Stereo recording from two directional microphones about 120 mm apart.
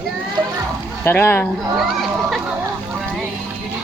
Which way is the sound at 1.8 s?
Centre (ahead or behind).